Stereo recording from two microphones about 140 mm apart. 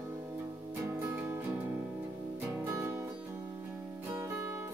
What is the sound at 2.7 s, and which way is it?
Music, 20° right (ahead or behind).